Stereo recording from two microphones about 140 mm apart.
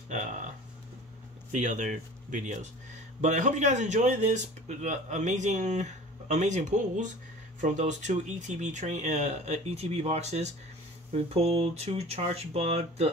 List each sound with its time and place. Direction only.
1.5 s speech: 60° right (ahead or behind)